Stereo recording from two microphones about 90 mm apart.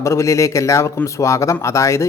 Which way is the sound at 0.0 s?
35° left (ahead or behind).